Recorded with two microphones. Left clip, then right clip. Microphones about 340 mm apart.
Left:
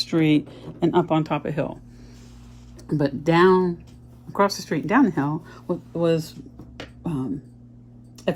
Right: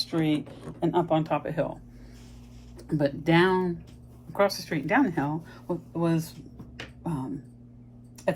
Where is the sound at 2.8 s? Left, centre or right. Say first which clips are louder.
Left 3 dB; left.